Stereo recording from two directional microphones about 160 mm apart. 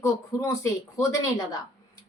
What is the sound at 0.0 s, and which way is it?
A woman's voice, 20° left (ahead or behind).